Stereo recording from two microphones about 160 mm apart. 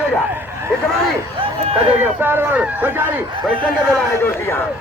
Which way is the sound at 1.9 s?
10° right (ahead or behind).